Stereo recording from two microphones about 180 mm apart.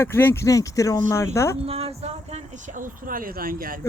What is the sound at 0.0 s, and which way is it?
Speech, 10° left (ahead or behind).